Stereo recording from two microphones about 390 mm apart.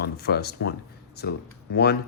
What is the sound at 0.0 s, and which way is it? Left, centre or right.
Speech, left.